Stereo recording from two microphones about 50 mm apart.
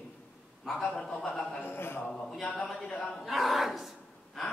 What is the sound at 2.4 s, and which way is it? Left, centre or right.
Speech, centre.